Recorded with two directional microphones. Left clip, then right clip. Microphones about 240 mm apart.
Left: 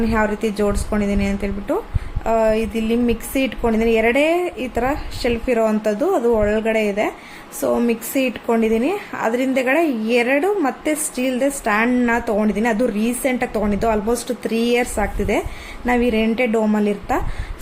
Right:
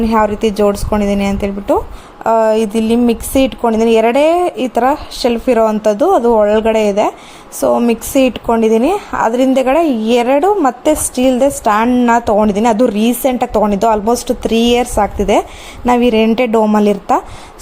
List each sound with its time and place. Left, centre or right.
0.0 s a woman's voice: right